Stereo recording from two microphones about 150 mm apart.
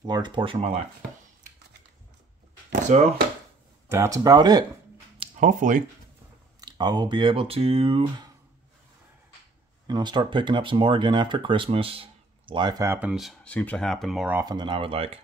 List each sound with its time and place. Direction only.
0.0 s speech: 30° right (ahead or behind)
2.9 s speech: 55° right (ahead or behind)
3.9 s speech: 20° right (ahead or behind)
5.4 s speech: 60° right (ahead or behind)
6.6 s speech: 30° right (ahead or behind)
9.8 s speech: 30° right (ahead or behind)
12.8 s speech: 15° right (ahead or behind)
13.1 s speech: centre (ahead or behind)
14.4 s speech: 30° right (ahead or behind)